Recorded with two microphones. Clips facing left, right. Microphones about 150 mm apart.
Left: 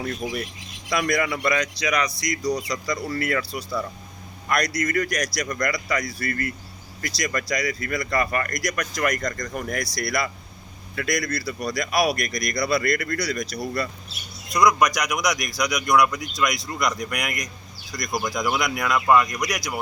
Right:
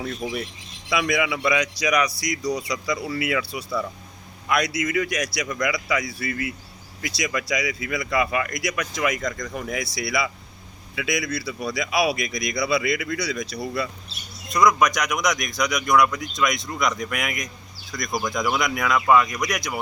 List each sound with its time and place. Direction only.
0.0 s speech: 5° right (ahead or behind)